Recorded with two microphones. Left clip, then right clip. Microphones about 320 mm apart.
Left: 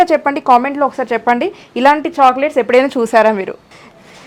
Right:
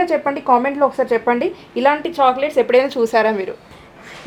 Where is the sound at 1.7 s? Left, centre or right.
Left.